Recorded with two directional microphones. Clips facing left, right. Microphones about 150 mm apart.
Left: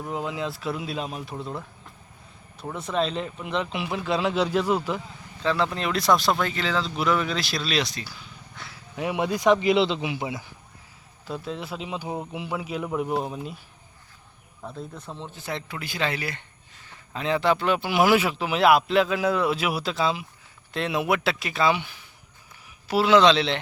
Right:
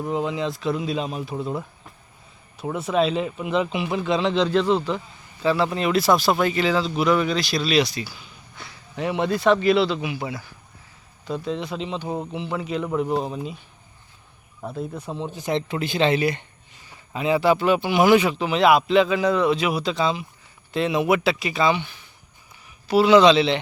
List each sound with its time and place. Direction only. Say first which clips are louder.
0.0 s speech: right 5 dB; centre (ahead or behind)
5.4 s speech: right 4 dB; 5° right (ahead or behind); by 10.5 s 20° left (ahead or behind)
11.3 s speech: right 5 dB; 5° left (ahead or behind)
14.7 s speech: right 7 dB; 10° right (ahead or behind)
16.9 s speech: right 4 dB; 10° right (ahead or behind)